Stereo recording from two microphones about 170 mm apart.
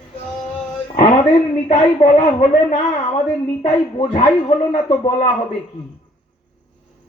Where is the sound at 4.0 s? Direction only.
45° left (ahead or behind).